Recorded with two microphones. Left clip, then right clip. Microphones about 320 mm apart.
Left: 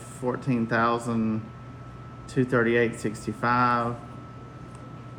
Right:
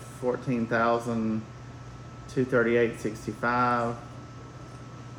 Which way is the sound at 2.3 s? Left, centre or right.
Left.